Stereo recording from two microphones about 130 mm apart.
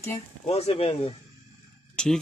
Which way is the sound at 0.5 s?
55° left (ahead or behind).